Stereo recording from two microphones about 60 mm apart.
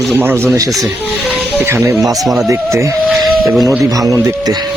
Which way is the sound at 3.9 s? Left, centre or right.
Right.